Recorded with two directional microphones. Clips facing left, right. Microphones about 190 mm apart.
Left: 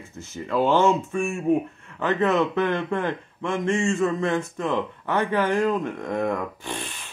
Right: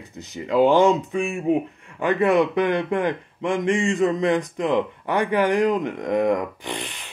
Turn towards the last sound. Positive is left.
turn(degrees=-15)  # may be behind; listen again after turning